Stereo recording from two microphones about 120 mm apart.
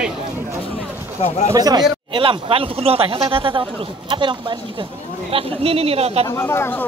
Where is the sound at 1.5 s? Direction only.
35° right (ahead or behind).